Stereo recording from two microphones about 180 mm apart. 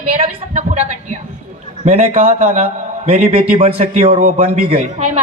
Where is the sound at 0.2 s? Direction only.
35° right (ahead or behind).